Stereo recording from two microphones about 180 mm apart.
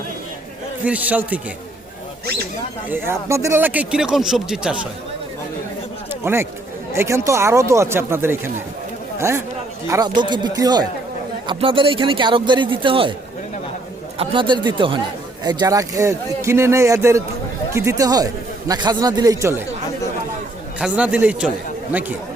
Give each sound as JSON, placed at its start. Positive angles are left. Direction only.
{"t": 0.9, "sound": "speech", "side_deg": -10}
{"t": 3.1, "sound": "speech", "side_deg": -15}
{"t": 6.2, "sound": "a man's voice", "side_deg": -15}
{"t": 14.2, "sound": "a man's voice", "side_deg": -25}
{"t": 20.7, "sound": "speech", "side_deg": -5}